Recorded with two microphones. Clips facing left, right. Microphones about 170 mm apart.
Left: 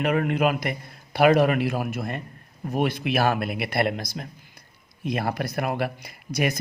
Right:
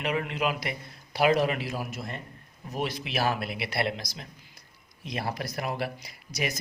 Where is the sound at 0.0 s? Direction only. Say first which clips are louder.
Left 7 dB; 50° left (ahead or behind).